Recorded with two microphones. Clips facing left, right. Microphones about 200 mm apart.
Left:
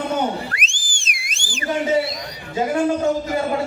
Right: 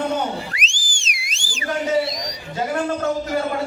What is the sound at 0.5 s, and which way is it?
Whistle, 55° left (ahead or behind).